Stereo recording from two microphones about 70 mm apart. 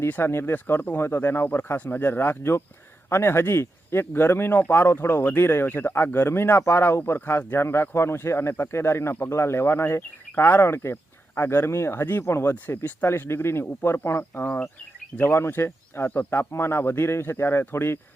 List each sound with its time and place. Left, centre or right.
0.1 s speech: left